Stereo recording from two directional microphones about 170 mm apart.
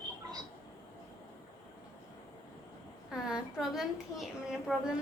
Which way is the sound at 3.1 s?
5° right (ahead or behind).